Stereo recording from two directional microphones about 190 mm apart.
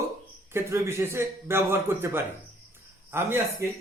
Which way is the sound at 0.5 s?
15° right (ahead or behind).